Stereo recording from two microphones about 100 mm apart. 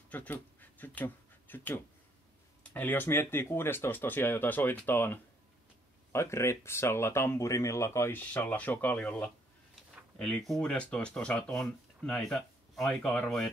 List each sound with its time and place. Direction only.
0.1 s speech: 15° left (ahead or behind)